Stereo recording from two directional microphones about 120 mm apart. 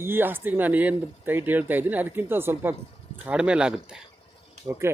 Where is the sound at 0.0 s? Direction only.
15° right (ahead or behind).